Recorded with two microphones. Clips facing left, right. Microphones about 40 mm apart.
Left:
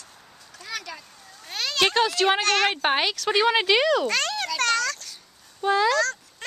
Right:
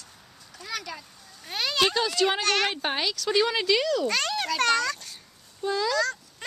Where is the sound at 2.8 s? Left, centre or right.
Left.